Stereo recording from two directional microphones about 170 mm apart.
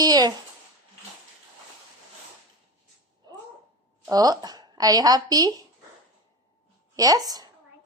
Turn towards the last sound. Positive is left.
turn(degrees=-20)  # may be behind; listen again after turning